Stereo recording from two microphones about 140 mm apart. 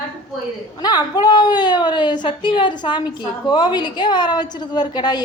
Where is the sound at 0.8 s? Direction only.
30° left (ahead or behind).